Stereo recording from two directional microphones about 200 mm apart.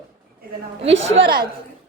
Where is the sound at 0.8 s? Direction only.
65° right (ahead or behind).